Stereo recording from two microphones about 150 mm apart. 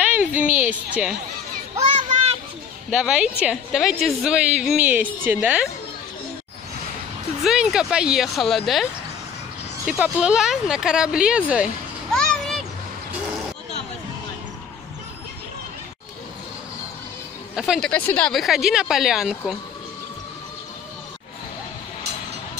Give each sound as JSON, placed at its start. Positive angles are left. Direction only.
{"t": 0.2, "sound": "a woman's voice", "side_deg": 60}
{"t": 1.0, "sound": "a woman's voice", "side_deg": -10}
{"t": 2.0, "sound": "children playing", "side_deg": -50}
{"t": 2.9, "sound": "a woman's voice", "side_deg": -5}
{"t": 7.4, "sound": "speech", "side_deg": -5}
{"t": 9.8, "sound": "speech", "side_deg": -5}
{"t": 12.1, "sound": "a sound", "side_deg": 5}
{"t": 17.6, "sound": "speech", "side_deg": 0}